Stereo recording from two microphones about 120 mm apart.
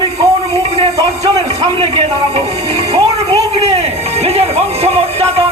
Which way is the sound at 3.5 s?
60° right (ahead or behind).